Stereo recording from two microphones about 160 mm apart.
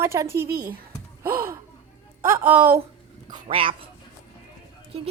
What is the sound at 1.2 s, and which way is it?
A woman's voice, 15° right (ahead or behind).